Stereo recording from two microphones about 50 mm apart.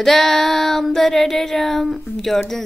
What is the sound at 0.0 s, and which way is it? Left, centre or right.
Child singing, centre.